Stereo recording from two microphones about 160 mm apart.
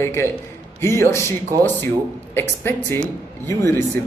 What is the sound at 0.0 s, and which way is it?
A man's voice, 15° left (ahead or behind).